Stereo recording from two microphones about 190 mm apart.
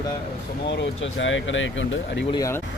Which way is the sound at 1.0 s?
85° left.